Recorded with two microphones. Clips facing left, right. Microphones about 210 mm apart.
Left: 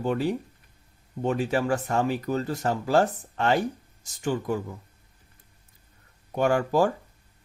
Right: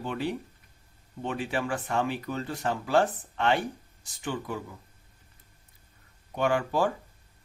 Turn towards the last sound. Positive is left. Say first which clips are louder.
# left 4 dB
turn(degrees=45)  # may be behind; listen again after turning